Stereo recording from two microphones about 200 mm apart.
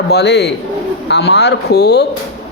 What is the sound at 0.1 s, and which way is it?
Speech, 55° left (ahead or behind).